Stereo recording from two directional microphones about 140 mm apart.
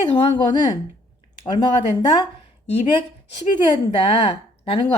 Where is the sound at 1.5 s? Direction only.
30° left (ahead or behind).